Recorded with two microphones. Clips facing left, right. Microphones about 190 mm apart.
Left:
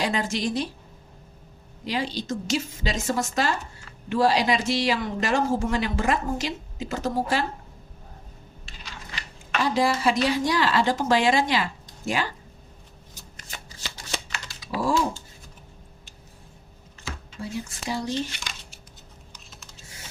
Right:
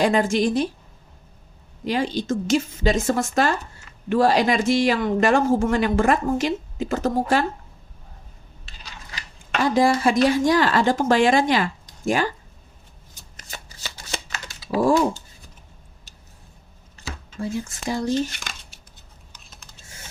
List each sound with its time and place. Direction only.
0.0 s speech: 50° right (ahead or behind)
1.8 s speech: 50° right (ahead or behind)
8.6 s a sound: 40° right (ahead or behind)
9.6 s speech: 50° right (ahead or behind)
14.7 s speech: 45° right (ahead or behind)
17.0 s speech: 45° right (ahead or behind)